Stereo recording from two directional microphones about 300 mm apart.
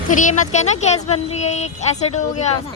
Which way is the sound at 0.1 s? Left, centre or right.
Left.